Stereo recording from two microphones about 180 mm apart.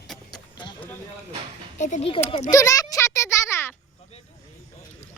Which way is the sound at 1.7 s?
40° left (ahead or behind).